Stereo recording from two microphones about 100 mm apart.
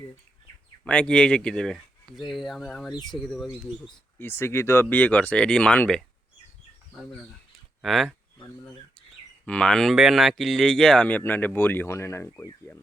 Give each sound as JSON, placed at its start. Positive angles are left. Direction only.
{"t": 0.9, "sound": "speech", "side_deg": 10}
{"t": 4.2, "sound": "speech", "side_deg": 25}
{"t": 6.9, "sound": "speech", "side_deg": 0}
{"t": 9.5, "sound": "speech", "side_deg": 10}
{"t": 9.9, "sound": "speech", "side_deg": -5}